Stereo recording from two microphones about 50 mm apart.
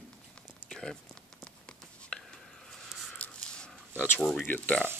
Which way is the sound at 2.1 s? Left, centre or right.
Left.